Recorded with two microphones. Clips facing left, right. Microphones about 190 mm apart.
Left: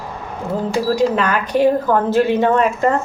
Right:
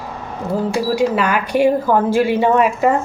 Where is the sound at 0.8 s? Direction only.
10° right (ahead or behind).